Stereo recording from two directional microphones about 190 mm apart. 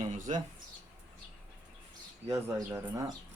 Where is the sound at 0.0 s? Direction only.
40° right (ahead or behind).